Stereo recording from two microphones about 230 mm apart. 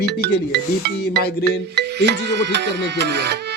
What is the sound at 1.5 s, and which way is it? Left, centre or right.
Music, right.